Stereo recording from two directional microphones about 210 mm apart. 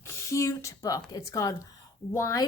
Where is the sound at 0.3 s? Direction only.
15° left (ahead or behind).